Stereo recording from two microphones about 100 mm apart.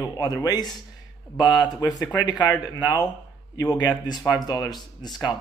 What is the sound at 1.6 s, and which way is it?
Speech, 40° left (ahead or behind).